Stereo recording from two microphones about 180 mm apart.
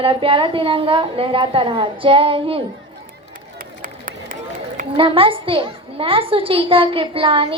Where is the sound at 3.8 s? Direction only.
50° right (ahead or behind).